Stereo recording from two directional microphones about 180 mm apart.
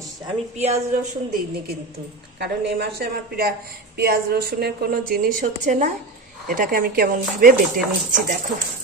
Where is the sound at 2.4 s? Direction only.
65° right (ahead or behind); by 7.6 s 50° right (ahead or behind).